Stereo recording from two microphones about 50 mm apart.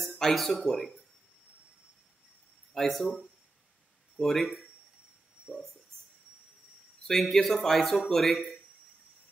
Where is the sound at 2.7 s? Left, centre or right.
Centre.